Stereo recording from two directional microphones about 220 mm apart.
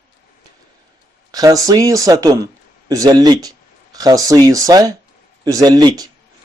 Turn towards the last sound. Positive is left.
turn(degrees=-20)  # may be behind; listen again after turning